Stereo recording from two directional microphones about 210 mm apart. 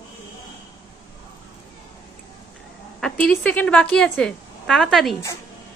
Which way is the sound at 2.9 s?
5° left (ahead or behind).